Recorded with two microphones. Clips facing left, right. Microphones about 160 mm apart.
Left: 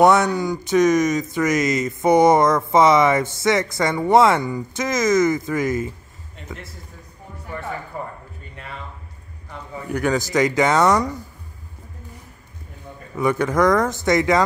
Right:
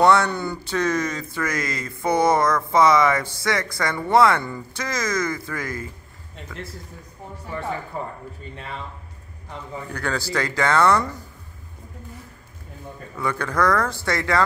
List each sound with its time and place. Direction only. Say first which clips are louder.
0.0 s speech: left 3 dB; 15° left (ahead or behind)
9.8 s speech: left 7 dB; 15° left (ahead or behind)
13.1 s speech: left 6 dB; 20° left (ahead or behind)